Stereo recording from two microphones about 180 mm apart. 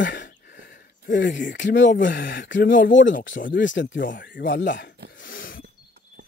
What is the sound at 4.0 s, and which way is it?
Speech, 50° left (ahead or behind).